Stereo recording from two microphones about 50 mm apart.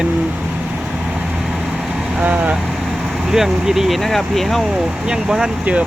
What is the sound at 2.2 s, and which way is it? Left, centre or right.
Speech, right.